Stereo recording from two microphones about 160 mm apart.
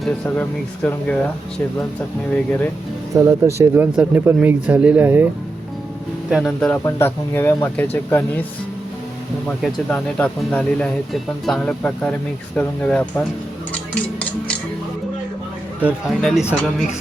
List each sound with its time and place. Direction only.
0.3 s speech: 10° left (ahead or behind)
3.2 s speech: 15° right (ahead or behind)
6.3 s speech: 5° left (ahead or behind)
9.6 s speech: 5° left (ahead or behind)
15.8 s speech: 5° right (ahead or behind)